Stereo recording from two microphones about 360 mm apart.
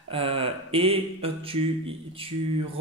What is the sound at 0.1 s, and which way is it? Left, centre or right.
A man's voice, centre.